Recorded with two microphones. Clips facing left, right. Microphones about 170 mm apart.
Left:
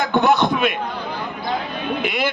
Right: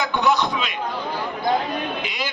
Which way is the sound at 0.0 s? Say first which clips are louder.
Left 4 dB; 55° left (ahead or behind).